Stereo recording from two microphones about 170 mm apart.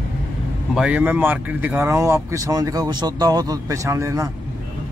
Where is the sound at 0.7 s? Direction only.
5° right (ahead or behind).